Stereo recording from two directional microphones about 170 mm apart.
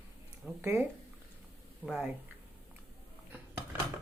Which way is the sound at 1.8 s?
5° right (ahead or behind).